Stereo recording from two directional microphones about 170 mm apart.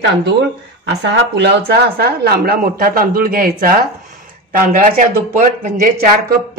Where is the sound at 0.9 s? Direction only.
85° right.